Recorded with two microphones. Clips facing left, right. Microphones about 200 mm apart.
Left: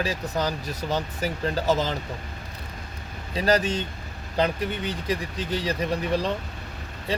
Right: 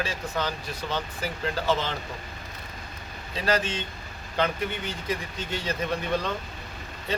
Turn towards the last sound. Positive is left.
turn(degrees=35)  # may be behind; listen again after turning